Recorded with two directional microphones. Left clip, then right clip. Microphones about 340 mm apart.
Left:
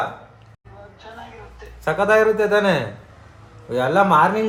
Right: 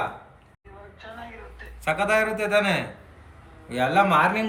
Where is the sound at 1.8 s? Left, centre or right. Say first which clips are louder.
Left 6 dB; centre.